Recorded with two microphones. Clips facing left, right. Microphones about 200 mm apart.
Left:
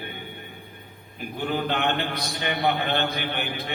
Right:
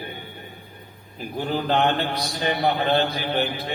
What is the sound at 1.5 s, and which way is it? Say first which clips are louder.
A man's voice: right 4 dB; 35° right (ahead or behind).